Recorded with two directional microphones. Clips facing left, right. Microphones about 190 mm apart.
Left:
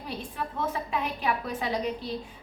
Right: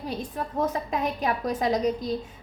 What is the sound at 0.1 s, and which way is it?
A woman's voice, 40° right (ahead or behind).